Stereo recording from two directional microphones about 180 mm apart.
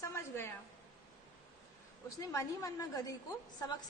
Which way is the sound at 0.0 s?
15° left (ahead or behind).